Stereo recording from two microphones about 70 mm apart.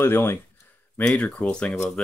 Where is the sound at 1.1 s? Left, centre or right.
Left.